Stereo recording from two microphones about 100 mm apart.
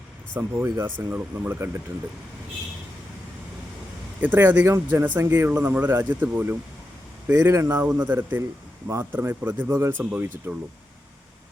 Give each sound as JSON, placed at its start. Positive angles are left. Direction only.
{"t": 0.3, "sound": "speech", "side_deg": -20}
{"t": 4.2, "sound": "speech", "side_deg": -20}